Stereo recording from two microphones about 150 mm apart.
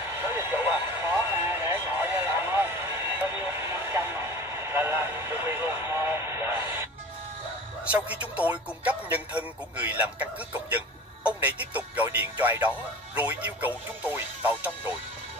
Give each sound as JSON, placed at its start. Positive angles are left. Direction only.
{"t": 0.2, "sound": "vehicle", "side_deg": -15}
{"t": 7.8, "sound": "speech", "side_deg": -10}